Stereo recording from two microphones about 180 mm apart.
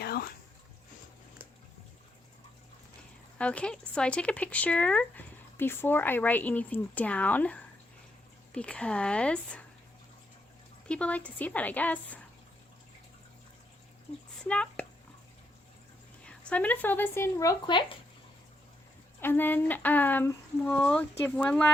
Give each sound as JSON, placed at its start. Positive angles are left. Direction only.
{"t": 0.0, "sound": "a sound", "side_deg": 60}
{"t": 3.3, "sound": "speech", "side_deg": 5}
{"t": 10.8, "sound": "speech", "side_deg": 5}
{"t": 14.4, "sound": "speech", "side_deg": 5}
{"t": 16.2, "sound": "speech", "side_deg": 5}
{"t": 19.2, "sound": "speech", "side_deg": 10}